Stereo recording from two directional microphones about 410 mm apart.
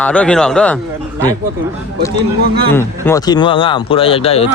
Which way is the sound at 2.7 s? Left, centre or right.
Centre.